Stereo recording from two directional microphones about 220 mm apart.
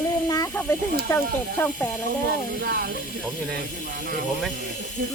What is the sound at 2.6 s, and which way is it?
Speech, 45° right (ahead or behind).